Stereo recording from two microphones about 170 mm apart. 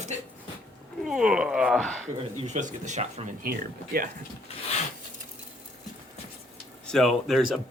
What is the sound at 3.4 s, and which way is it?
Speech, 60° right (ahead or behind).